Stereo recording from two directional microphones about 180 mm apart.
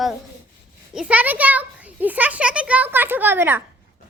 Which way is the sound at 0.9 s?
5° right (ahead or behind).